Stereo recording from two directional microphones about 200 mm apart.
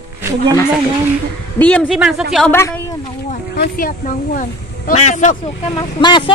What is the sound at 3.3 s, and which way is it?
Speech, 40° left (ahead or behind).